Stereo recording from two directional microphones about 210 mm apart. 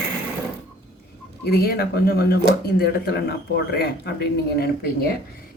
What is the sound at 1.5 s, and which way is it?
Speech, 45° left (ahead or behind).